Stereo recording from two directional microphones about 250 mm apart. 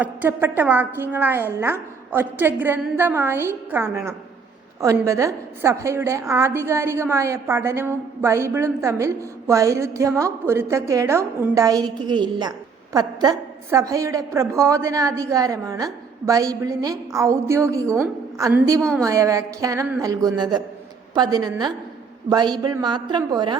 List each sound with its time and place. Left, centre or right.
0.0 s a woman's voice: centre